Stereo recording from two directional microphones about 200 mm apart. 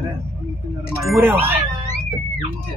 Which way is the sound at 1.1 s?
10° right (ahead or behind).